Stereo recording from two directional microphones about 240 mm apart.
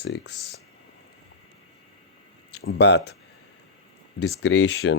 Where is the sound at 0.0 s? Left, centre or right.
Left.